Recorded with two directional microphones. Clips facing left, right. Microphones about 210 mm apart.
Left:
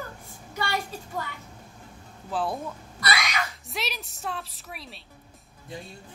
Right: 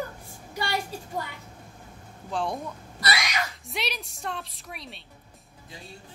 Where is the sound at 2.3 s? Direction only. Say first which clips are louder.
Left 1 dB; 5° left (ahead or behind).